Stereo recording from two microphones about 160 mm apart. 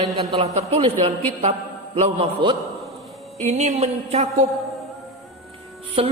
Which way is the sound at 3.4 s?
45° right (ahead or behind).